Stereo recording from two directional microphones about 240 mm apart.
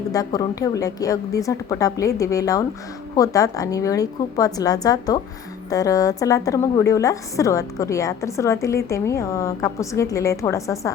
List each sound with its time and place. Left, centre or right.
0.1 s a woman's voice: centre